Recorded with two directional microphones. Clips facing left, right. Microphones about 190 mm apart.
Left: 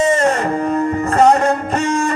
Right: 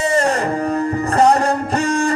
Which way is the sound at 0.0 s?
35° right (ahead or behind).